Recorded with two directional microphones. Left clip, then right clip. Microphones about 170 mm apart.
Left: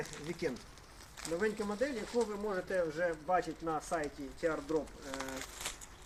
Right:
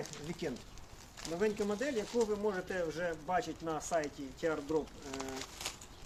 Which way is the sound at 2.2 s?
75° right (ahead or behind).